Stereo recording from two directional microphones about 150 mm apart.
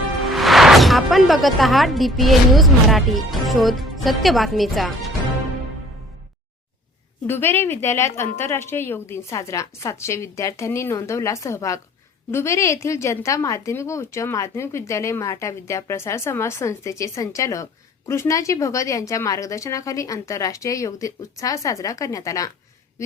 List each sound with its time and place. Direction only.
0.3 s speech: centre (ahead or behind)
7.3 s a woman's voice: 15° left (ahead or behind)